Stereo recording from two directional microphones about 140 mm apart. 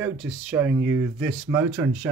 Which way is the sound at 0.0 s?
10° right (ahead or behind).